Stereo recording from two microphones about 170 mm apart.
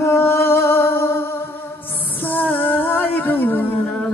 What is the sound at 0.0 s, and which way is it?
Music, 15° left (ahead or behind).